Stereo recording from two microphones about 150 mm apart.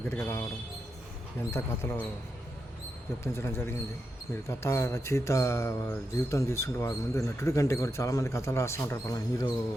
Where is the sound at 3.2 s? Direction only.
20° left (ahead or behind).